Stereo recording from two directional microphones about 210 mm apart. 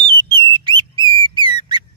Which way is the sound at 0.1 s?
20° right (ahead or behind).